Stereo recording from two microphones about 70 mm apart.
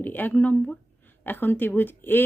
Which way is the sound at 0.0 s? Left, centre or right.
Left.